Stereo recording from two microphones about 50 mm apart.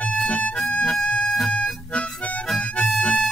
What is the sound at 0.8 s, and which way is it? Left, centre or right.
Music, centre.